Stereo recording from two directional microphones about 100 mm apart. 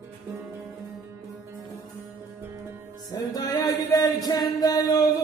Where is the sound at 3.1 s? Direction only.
40° left (ahead or behind).